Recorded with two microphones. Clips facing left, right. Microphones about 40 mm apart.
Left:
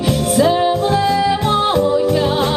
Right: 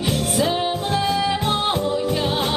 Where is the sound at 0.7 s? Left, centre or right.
Centre.